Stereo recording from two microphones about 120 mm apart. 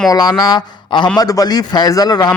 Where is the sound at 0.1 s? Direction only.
30° left (ahead or behind).